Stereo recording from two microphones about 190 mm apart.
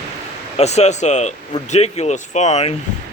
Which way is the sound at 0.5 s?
35° left (ahead or behind).